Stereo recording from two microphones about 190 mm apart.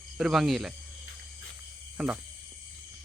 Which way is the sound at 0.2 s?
Centre (ahead or behind).